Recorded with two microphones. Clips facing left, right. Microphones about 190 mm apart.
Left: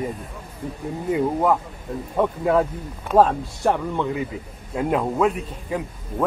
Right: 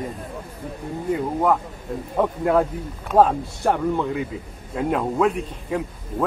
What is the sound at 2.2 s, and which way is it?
A man's voice, centre (ahead or behind).